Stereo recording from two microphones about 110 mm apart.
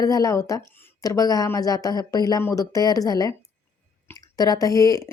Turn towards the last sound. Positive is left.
turn(degrees=35)  # may be behind; listen again after turning